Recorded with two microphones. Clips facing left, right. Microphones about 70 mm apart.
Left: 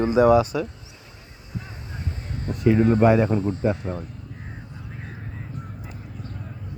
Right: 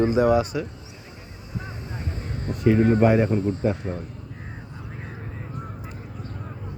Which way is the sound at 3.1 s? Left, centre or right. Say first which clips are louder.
Left 1 dB; left.